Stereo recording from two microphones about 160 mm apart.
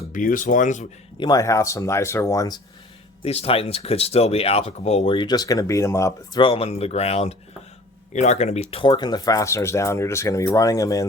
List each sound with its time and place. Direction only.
0.1 s speech: 55° left (ahead or behind)
1.2 s speech: 20° left (ahead or behind)
3.2 s speech: 40° left (ahead or behind); by 6.4 s 20° left (ahead or behind)
6.4 s speech: 35° left (ahead or behind); by 11.0 s 20° left (ahead or behind)